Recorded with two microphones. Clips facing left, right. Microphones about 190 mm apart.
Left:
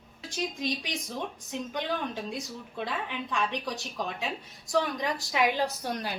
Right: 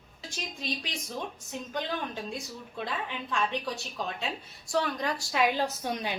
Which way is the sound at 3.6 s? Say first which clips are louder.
Left 1 dB; 10° left (ahead or behind).